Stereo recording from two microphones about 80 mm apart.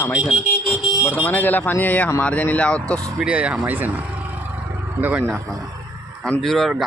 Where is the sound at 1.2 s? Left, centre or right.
Left.